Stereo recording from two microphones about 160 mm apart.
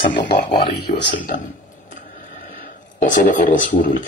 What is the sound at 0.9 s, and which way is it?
Speech, 75° left (ahead or behind).